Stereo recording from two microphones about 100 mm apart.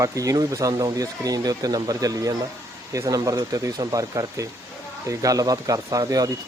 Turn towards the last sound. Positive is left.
turn(degrees=-40)  # may be behind; listen again after turning